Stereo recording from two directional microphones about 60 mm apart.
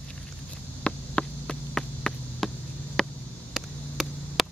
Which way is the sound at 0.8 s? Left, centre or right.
Centre.